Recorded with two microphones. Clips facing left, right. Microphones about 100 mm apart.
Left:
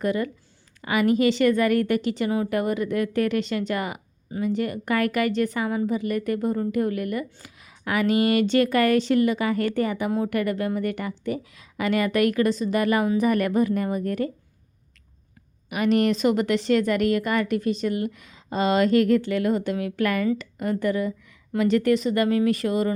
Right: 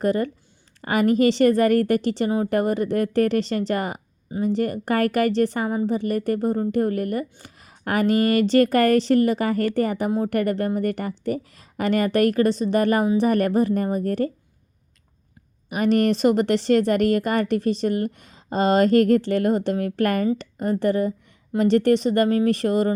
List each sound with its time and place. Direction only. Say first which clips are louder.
0.0 s a woman's voice: right 3 dB; 35° right (ahead or behind)
15.7 s a woman's voice: right 2 dB; 40° right (ahead or behind)